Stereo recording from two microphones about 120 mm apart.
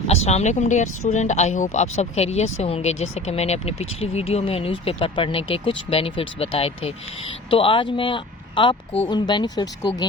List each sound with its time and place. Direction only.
0.1 s speech: 65° left (ahead or behind); by 9.9 s 40° left (ahead or behind)